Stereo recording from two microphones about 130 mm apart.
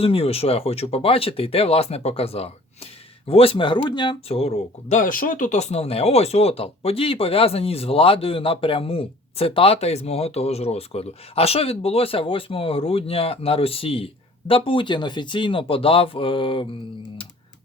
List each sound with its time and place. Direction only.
0.0 s speech: 45° left (ahead or behind)
4.3 s speech: 50° left (ahead or behind)
4.9 s speech: 90° left; by 16.6 s 40° left (ahead or behind)